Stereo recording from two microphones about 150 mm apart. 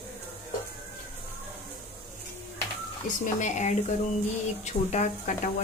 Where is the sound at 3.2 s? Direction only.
55° left (ahead or behind).